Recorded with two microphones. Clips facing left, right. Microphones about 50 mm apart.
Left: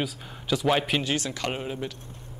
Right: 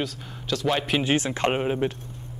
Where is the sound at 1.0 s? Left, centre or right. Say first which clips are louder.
Right 6 dB; right.